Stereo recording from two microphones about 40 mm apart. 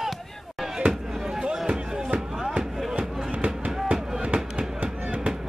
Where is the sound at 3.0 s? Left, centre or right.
Right.